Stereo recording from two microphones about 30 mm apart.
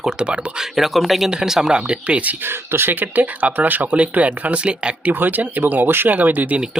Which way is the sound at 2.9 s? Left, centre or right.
Right.